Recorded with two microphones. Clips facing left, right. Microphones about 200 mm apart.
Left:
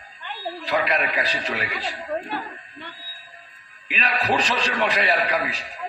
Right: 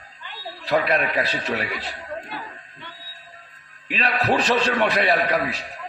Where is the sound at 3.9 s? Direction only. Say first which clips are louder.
Right 2 dB; 40° right (ahead or behind).